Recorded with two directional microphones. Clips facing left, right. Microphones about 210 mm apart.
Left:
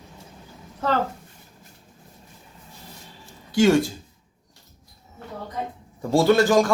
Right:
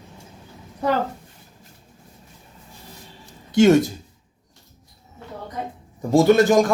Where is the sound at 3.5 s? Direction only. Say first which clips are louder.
Right 3 dB; 20° right (ahead or behind).